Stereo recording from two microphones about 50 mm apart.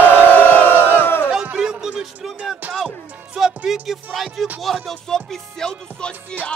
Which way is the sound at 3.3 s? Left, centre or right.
Centre.